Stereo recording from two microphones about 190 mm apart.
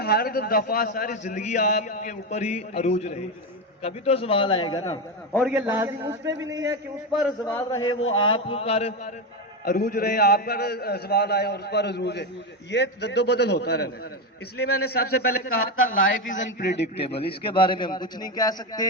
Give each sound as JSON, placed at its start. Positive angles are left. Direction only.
{"t": 0.0, "sound": "a man's voice", "side_deg": 55}
{"t": 5.4, "sound": "a man's voice", "side_deg": -5}
{"t": 7.4, "sound": "a man's voice", "side_deg": 15}
{"t": 8.1, "sound": "a man's voice", "side_deg": 25}
{"t": 9.6, "sound": "a man's voice", "side_deg": 50}
{"t": 15.5, "sound": "a man's voice", "side_deg": 90}
{"t": 17.4, "sound": "a man's voice", "side_deg": 25}